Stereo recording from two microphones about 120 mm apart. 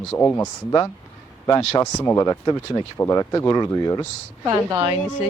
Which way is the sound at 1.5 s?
30° left (ahead or behind).